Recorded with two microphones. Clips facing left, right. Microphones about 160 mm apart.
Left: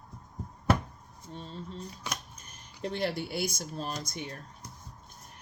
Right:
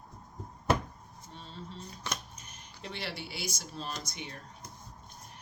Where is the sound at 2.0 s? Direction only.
10° left (ahead or behind).